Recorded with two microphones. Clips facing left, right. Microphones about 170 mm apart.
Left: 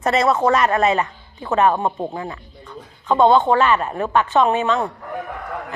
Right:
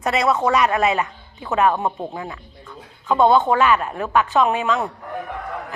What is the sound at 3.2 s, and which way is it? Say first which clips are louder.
Speech: left 1 dB; 20° left (ahead or behind).